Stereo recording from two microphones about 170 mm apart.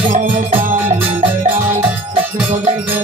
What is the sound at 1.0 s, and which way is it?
Music, 10° right (ahead or behind).